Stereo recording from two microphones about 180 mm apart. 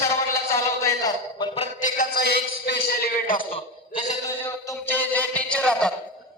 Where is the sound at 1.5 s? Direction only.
40° left (ahead or behind); by 3.4 s 60° left (ahead or behind).